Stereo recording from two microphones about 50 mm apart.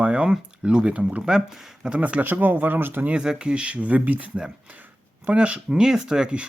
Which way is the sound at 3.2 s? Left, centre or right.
Centre.